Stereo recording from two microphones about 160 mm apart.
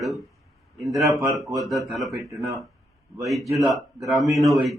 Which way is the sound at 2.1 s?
20° right (ahead or behind).